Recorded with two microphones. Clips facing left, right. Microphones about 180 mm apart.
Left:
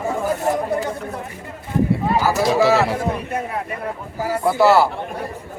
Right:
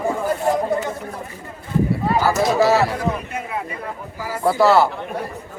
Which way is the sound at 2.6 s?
25° left (ahead or behind).